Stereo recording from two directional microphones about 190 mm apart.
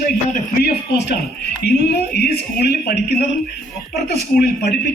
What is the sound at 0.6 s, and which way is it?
Speech, 65° left (ahead or behind).